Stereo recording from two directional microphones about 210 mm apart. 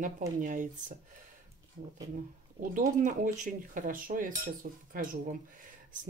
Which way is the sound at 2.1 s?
40° right (ahead or behind).